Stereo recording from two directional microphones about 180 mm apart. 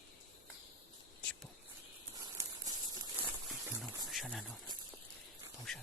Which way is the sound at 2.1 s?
20° right (ahead or behind).